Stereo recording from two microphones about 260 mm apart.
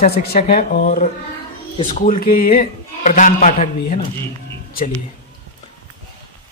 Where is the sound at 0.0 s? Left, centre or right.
Left.